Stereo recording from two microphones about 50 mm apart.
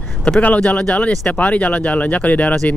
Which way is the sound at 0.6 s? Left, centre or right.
Left.